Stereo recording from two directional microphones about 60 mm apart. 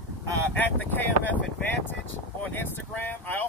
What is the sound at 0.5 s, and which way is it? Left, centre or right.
Speech, left.